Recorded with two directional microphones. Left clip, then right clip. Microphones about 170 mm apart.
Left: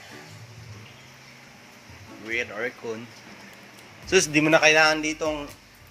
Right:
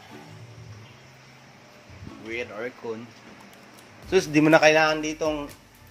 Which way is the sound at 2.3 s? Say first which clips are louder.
Left 4 dB; centre (ahead or behind).